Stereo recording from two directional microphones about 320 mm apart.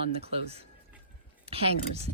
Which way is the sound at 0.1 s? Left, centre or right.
Centre.